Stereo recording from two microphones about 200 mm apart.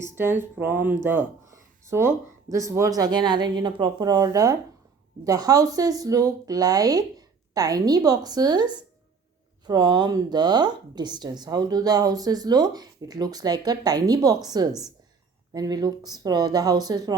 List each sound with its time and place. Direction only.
0.2 s a woman's voice: 10° right (ahead or behind)